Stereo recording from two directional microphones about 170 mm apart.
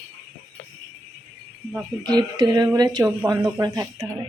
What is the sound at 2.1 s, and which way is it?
Speech, 25° right (ahead or behind).